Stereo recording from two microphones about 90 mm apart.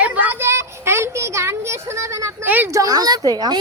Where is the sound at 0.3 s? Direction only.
30° right (ahead or behind).